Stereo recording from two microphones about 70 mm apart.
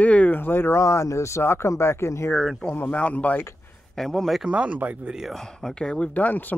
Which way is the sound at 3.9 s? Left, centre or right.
Centre.